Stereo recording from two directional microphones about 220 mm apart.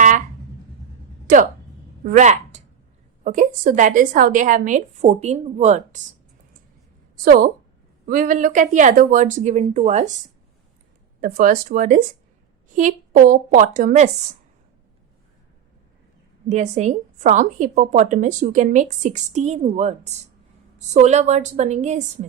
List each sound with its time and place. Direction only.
2.0 s a woman's voice: 35° right (ahead or behind)
7.3 s a woman's voice: 40° right (ahead or behind)
11.2 s a woman's voice: 40° right (ahead or behind)
16.5 s a woman's voice: 30° right (ahead or behind)